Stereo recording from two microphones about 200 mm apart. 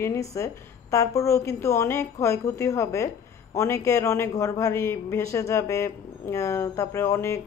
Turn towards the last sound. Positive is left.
turn(degrees=15)  # may be behind; listen again after turning